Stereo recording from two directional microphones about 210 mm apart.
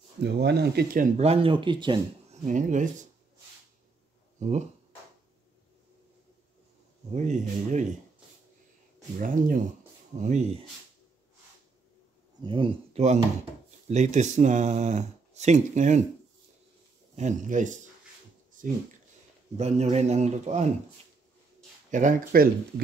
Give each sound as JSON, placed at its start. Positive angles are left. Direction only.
{"t": 0.2, "sound": "speech", "side_deg": -55}
{"t": 1.1, "sound": "speech", "side_deg": -30}
{"t": 2.4, "sound": "speech", "side_deg": -35}
{"t": 4.4, "sound": "speech", "side_deg": -35}
{"t": 7.2, "sound": "speech", "side_deg": -35}
{"t": 9.2, "sound": "speech", "side_deg": -40}
{"t": 12.4, "sound": "speech", "side_deg": -25}
{"t": 17.1, "sound": "speech", "side_deg": -35}
{"t": 18.6, "sound": "a sound", "side_deg": -40}
{"t": 19.5, "sound": "speech", "side_deg": -30}
{"t": 21.9, "sound": "speech", "side_deg": -40}